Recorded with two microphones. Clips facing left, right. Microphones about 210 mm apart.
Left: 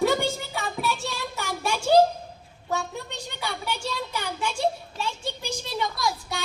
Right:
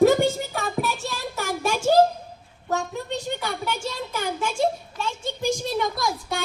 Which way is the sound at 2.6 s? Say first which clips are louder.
Right 3 dB; 45° right (ahead or behind).